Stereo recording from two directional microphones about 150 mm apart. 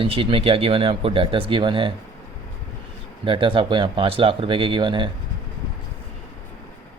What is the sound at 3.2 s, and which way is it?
Speech, 35° right (ahead or behind).